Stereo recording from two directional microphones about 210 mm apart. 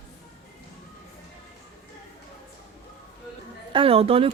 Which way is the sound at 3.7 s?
25° right (ahead or behind).